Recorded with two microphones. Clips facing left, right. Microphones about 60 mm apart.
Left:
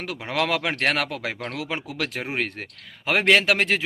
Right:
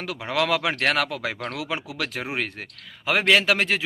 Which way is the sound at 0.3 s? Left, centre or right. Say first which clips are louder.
Right 1 dB; left.